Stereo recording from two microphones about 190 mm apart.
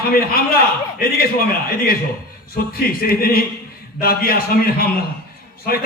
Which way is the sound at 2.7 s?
50° left (ahead or behind).